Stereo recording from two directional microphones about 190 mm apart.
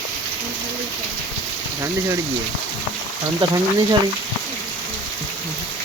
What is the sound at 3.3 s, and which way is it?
Speech, 20° right (ahead or behind).